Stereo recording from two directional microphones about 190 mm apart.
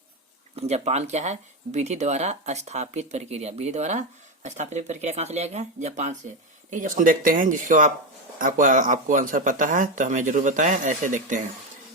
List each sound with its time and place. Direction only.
0.5 s speech: 35° right (ahead or behind)